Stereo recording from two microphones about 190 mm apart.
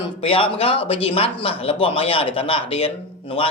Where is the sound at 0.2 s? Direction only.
30° left (ahead or behind).